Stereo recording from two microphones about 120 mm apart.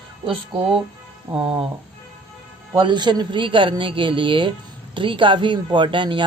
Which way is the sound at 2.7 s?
40° right (ahead or behind).